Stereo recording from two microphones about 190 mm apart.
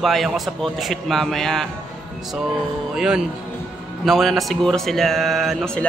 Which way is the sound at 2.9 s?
5° right (ahead or behind).